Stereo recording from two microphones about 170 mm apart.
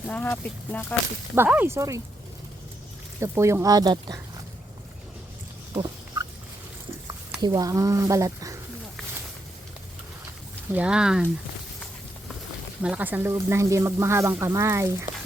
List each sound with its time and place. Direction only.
0.1 s speech: 10° left (ahead or behind)
1.4 s speech: 10° right (ahead or behind)
3.2 s speech: 15° right (ahead or behind)
5.7 s a sound: 25° right (ahead or behind)
7.3 s speech: 20° right (ahead or behind)
10.7 s speech: 5° right (ahead or behind)
12.8 s speech: 10° right (ahead or behind)